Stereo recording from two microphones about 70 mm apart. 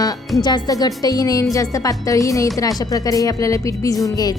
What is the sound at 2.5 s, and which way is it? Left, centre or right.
Speech, left.